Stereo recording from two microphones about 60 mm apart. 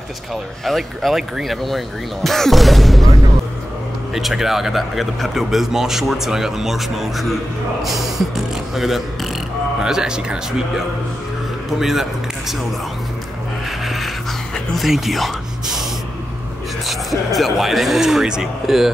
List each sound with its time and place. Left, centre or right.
0.3 s speech: centre
4.1 s speech: centre
11.8 s speech: centre
13.7 s a sound: centre
17.3 s speech: centre